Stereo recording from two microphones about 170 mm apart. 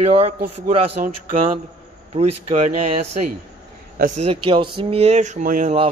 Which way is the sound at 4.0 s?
50° right (ahead or behind).